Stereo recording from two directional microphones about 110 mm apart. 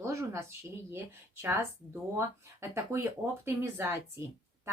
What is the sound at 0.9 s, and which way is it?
Speech, 20° right (ahead or behind).